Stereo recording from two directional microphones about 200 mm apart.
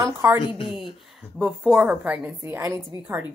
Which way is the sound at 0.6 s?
Centre (ahead or behind).